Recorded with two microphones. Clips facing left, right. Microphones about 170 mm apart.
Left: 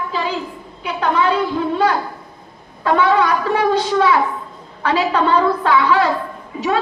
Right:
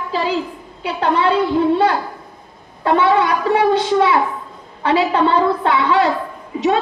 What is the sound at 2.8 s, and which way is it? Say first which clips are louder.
A woman's voice: right 1 dB; 25° right (ahead or behind).